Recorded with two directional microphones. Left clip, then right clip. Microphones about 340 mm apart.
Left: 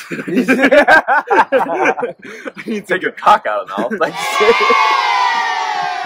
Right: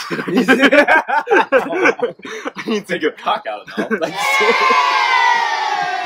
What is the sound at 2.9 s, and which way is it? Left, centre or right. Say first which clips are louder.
Speech: left 9 dB; centre.